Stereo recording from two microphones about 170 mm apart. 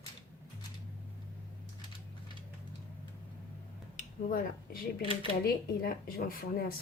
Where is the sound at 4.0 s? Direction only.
60° left (ahead or behind).